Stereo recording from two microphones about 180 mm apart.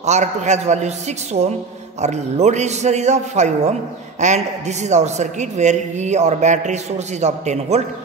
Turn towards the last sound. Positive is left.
turn(degrees=-40)  # may be behind; listen again after turning